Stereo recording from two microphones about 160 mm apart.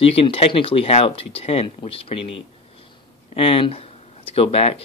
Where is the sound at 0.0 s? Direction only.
35° left (ahead or behind).